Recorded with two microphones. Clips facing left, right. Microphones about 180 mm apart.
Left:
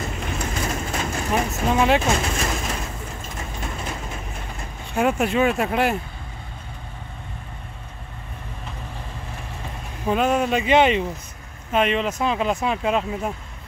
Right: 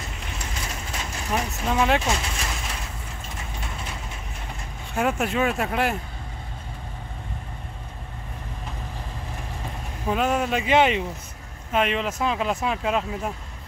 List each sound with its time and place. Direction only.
0.0 s vehicle: 50° left (ahead or behind)
4.9 s speech: centre (ahead or behind)
10.0 s speech: centre (ahead or behind)